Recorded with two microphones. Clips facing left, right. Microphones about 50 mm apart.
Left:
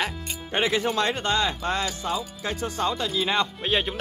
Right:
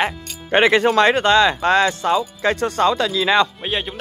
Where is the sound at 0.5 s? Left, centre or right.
Right.